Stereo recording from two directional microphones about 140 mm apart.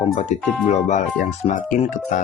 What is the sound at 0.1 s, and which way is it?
Speech, 55° left (ahead or behind).